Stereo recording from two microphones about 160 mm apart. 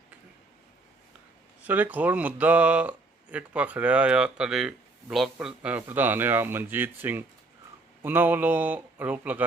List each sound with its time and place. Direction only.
1.6 s speech: 10° right (ahead or behind)